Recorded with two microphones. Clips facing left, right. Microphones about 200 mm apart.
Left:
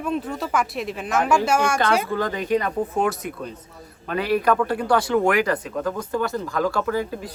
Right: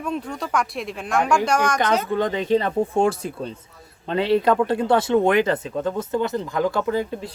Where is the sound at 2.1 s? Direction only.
20° right (ahead or behind).